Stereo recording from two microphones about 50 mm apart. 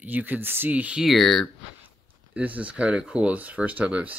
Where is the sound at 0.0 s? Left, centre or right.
Right.